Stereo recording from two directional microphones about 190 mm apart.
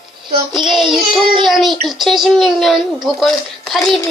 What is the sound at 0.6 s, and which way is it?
Child singing, 25° right (ahead or behind).